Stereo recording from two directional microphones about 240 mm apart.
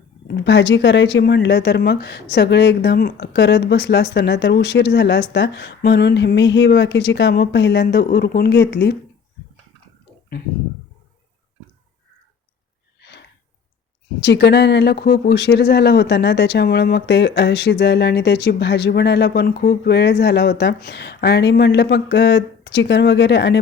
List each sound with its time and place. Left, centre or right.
0.3 s speech: left
13.0 s a sound: left
14.2 s speech: left